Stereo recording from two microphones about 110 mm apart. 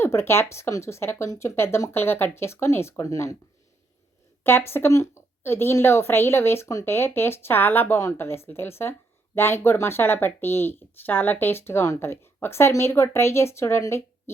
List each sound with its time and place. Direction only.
0.0 s a woman's voice: 25° left (ahead or behind)
4.4 s a woman's voice: 20° left (ahead or behind)